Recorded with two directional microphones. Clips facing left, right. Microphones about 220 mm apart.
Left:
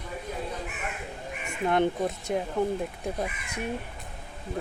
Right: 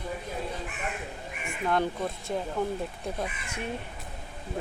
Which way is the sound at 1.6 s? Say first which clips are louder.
Left 3 dB; 20° left (ahead or behind).